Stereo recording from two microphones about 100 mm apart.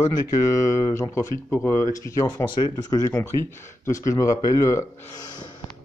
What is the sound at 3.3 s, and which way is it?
Speech, 55° right (ahead or behind).